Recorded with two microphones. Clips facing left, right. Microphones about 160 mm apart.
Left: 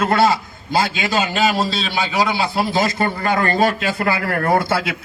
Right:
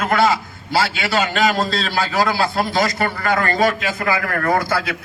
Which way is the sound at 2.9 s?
25° left (ahead or behind).